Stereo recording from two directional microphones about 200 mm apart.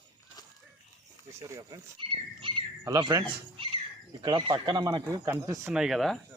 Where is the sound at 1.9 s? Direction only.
25° right (ahead or behind).